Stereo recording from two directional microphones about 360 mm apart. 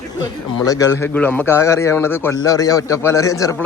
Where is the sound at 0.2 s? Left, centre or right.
Centre.